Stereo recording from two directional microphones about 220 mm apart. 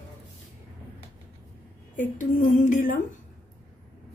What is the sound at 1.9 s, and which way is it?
A woman's voice, 35° left (ahead or behind).